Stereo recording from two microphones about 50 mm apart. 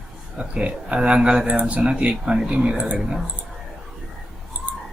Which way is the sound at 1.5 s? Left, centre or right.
Right.